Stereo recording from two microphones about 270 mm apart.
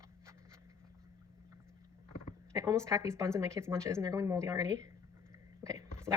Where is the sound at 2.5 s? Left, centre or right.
Centre.